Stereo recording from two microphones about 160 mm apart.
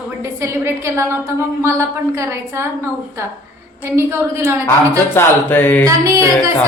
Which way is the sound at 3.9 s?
15° right (ahead or behind).